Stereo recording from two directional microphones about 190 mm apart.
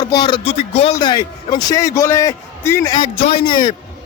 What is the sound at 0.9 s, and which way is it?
A man's voice, 20° left (ahead or behind).